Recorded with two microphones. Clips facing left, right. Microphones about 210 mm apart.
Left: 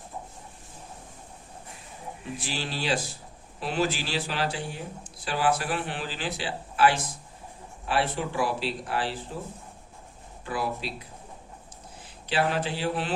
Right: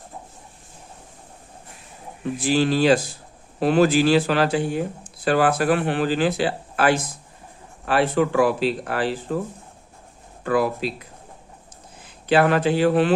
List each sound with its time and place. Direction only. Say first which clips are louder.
2.5 s speech: right 13 dB; 50° right (ahead or behind)
7.9 s speech: right 9 dB; 60° right (ahead or behind)
10.4 s speech: right 11 dB; 55° right (ahead or behind)
12.3 s speech: right 9 dB; 65° right (ahead or behind)